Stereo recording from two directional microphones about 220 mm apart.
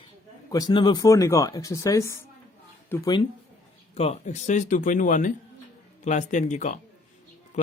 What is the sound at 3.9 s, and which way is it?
Speech, 30° left (ahead or behind).